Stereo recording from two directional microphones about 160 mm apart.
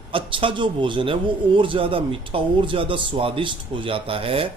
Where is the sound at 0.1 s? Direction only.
35° right (ahead or behind).